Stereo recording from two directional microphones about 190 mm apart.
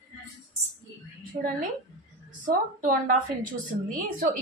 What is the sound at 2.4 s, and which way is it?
A woman's voice, 45° right (ahead or behind).